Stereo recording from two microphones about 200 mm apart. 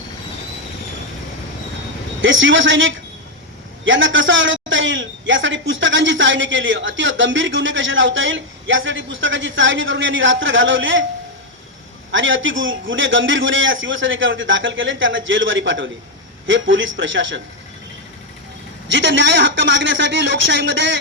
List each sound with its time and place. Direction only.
2.2 s a man's voice: 70° right (ahead or behind)
12.1 s a man's voice: 70° right (ahead or behind)
18.9 s a man's voice: 65° right (ahead or behind)